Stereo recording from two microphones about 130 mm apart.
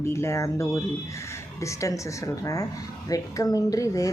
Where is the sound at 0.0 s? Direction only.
20° left (ahead or behind).